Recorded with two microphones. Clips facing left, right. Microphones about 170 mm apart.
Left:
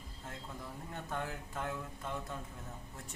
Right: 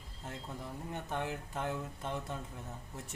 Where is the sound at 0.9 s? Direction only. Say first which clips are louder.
Right 2 dB; 20° right (ahead or behind).